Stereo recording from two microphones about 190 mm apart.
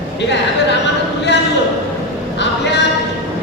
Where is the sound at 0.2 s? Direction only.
65° left (ahead or behind).